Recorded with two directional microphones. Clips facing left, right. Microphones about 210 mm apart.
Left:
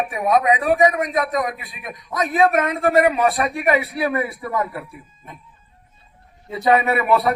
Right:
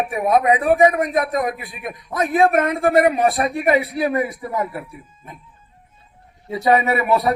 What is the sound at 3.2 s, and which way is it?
A man's voice, 30° right (ahead or behind).